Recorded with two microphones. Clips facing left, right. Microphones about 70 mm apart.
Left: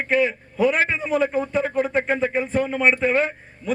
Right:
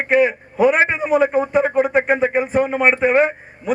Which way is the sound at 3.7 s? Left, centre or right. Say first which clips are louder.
Right 4 dB; centre.